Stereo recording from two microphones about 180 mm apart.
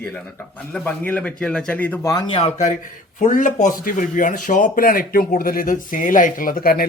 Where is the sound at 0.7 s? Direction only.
10° left (ahead or behind).